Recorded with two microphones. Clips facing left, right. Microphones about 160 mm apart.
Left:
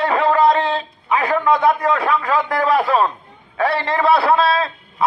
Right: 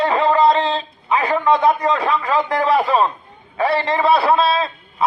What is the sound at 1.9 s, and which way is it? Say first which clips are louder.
A man's voice: even; 10° right (ahead or behind).